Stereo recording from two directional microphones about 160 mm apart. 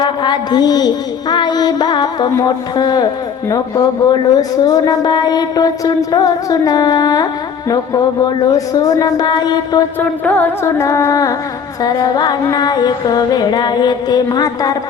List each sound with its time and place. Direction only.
0.0 s a woman's voice: 30° left (ahead or behind)
8.5 s speech: 20° left (ahead or behind)
10.0 s music: 10° left (ahead or behind)
11.8 s speech: 25° left (ahead or behind)